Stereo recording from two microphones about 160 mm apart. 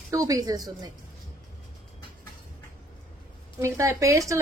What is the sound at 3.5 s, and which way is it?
Speech, 15° right (ahead or behind).